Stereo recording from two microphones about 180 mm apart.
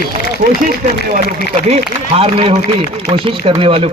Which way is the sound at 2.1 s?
30° right (ahead or behind).